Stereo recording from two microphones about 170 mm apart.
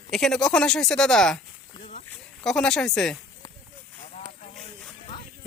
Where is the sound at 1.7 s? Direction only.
40° left (ahead or behind).